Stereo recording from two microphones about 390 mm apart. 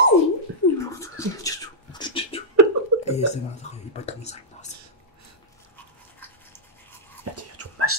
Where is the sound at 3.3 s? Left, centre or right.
Centre.